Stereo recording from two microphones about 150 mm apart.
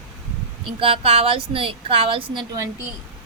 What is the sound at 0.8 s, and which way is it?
A woman's voice, 40° right (ahead or behind).